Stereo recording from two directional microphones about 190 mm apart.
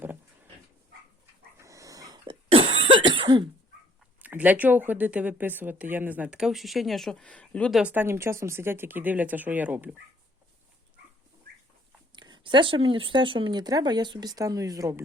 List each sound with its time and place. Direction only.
1.5 s cough: 15° right (ahead or behind)
4.2 s speech: 10° right (ahead or behind)
7.8 s speech: 10° right (ahead or behind)
12.1 s speech: 25° right (ahead or behind)